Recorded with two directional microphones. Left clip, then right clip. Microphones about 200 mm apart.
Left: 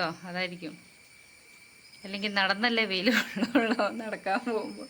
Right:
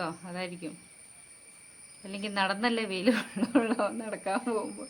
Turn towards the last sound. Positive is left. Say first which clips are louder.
# even
turn(degrees=0)  # may be behind; listen again after turning